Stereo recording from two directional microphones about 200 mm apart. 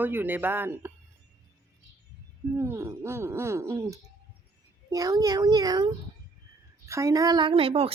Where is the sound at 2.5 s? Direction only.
15° right (ahead or behind).